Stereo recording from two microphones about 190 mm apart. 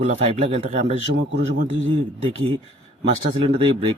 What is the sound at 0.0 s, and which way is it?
A man's voice, 35° right (ahead or behind).